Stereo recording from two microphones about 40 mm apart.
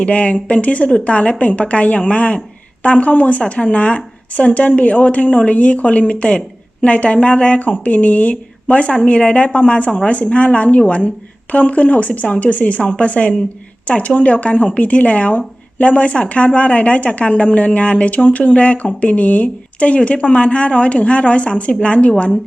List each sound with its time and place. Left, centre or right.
0.0 s a woman's voice: left